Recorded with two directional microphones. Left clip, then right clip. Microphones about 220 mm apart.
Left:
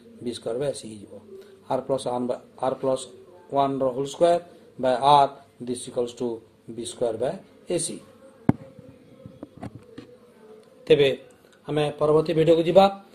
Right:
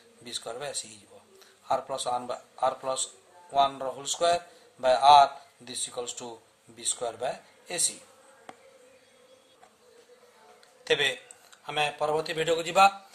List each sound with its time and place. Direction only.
0.2 s speech: 15° right (ahead or behind)
10.9 s speech: 20° right (ahead or behind)